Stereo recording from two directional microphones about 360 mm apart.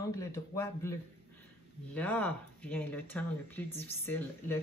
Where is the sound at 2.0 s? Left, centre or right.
Centre.